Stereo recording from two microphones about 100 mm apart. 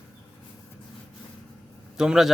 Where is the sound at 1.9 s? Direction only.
5° right (ahead or behind).